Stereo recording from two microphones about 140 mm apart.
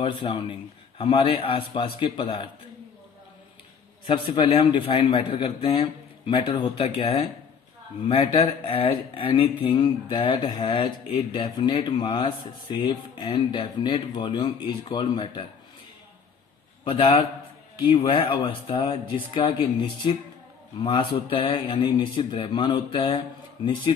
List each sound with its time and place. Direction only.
0.0 s speech: 40° left (ahead or behind)
4.1 s speech: 35° left (ahead or behind)
16.8 s a man's voice: 35° left (ahead or behind)